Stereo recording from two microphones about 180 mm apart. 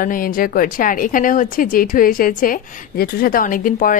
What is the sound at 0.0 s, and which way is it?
A woman's voice, 50° left (ahead or behind).